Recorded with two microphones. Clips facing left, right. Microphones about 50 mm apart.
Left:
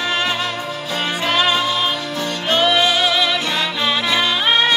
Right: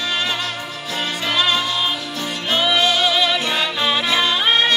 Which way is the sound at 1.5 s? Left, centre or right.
Centre.